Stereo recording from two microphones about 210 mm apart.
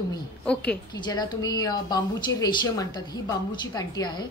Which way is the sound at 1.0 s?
20° left (ahead or behind).